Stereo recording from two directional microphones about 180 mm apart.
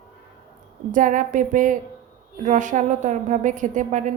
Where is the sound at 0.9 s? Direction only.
45° right (ahead or behind).